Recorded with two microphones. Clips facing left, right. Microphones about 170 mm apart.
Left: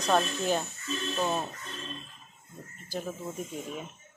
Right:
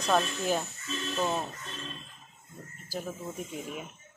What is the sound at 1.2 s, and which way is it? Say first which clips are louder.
Speech: even; 10° left (ahead or behind).